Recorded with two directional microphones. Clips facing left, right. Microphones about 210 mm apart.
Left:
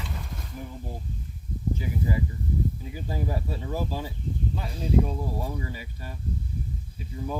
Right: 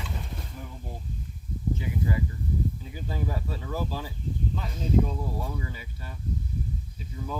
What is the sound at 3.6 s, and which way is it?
Speech, 20° left (ahead or behind).